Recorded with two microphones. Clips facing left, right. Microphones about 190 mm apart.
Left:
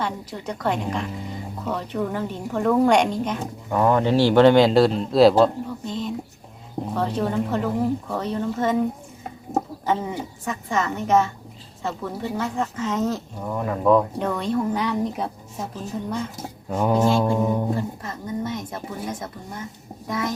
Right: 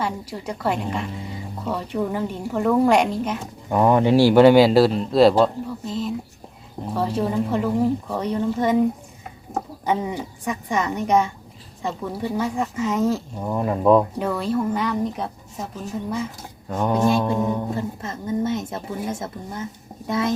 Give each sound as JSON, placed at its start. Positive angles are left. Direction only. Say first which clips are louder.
{"t": 0.0, "sound": "a woman's voice", "louder": "right 1 dB", "side_deg": -10}
{"t": 3.7, "sound": "a woman's voice", "louder": "right 3 dB", "side_deg": -15}
{"t": 9.8, "sound": "a woman's voice", "louder": "right 1 dB", "side_deg": -15}
{"t": 13.4, "sound": "speech", "louder": "right 2 dB", "side_deg": -20}
{"t": 14.2, "sound": "speech", "louder": "right 1 dB", "side_deg": -5}
{"t": 16.6, "sound": "speech", "louder": "even", "side_deg": 5}
{"t": 17.7, "sound": "speech", "louder": "right 1 dB", "side_deg": -25}
{"t": 20.1, "sound": "speech", "louder": "right 4 dB", "side_deg": -25}